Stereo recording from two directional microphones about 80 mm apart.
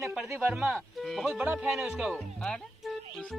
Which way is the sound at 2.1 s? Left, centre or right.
Centre.